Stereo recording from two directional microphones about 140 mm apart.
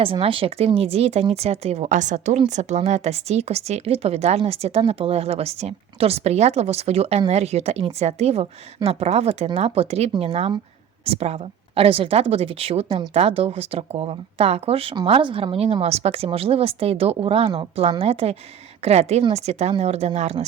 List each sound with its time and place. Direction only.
0.0 s a woman's voice: 40° right (ahead or behind)